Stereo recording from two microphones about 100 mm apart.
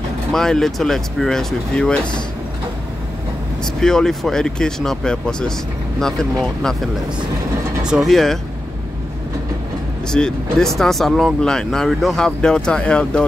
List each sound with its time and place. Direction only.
0.3 s speech: 5° left (ahead or behind)
3.8 s speech: 5° left (ahead or behind)
7.8 s speech: 5° right (ahead or behind)
10.1 s speech: 5° left (ahead or behind)